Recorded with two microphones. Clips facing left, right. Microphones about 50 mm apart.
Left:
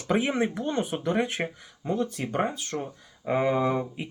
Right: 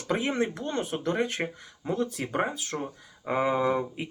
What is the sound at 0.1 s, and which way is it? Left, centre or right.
Speech, centre.